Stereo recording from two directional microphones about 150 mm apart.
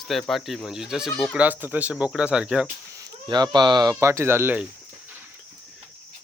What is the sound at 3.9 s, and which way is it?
Speech, 15° right (ahead or behind).